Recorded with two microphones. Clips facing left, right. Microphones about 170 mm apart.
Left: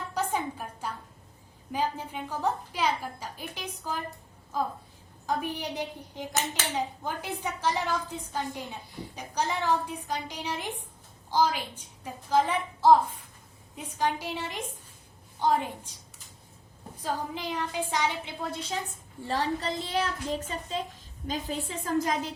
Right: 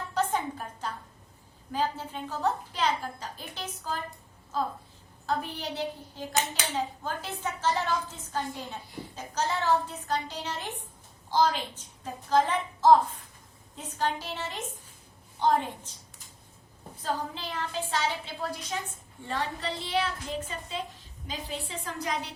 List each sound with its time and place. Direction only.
0.1 s music: 10° left (ahead or behind)
1.7 s a woman's voice: 15° left (ahead or behind)
17.0 s a woman's voice: 15° left (ahead or behind)
19.3 s a woman's voice: 40° left (ahead or behind)